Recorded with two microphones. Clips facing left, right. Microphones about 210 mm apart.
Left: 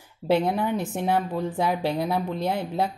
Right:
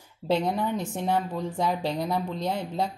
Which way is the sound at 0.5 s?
10° left (ahead or behind).